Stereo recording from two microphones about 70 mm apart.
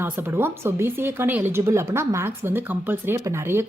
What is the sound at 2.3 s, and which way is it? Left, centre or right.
A woman's voice, right.